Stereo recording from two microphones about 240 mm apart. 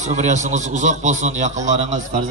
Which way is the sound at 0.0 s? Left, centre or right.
Right.